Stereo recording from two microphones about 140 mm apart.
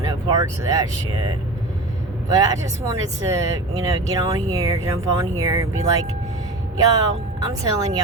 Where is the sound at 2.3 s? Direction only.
25° right (ahead or behind).